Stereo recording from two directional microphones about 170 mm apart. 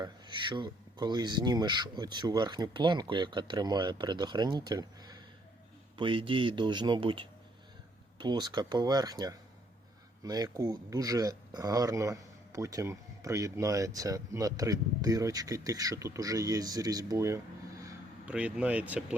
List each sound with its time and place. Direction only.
0.0 s speech: 25° right (ahead or behind)
18.3 s speech: 5° right (ahead or behind)